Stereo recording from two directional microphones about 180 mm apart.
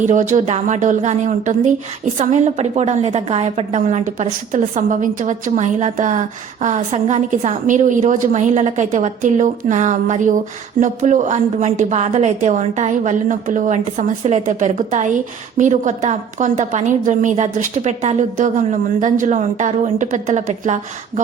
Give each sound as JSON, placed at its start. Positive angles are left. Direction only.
{"t": 0.0, "sound": "a woman's voice", "side_deg": -45}